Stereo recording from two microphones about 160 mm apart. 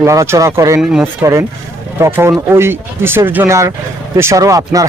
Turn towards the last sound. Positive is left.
turn(degrees=-20)  # may be behind; listen again after turning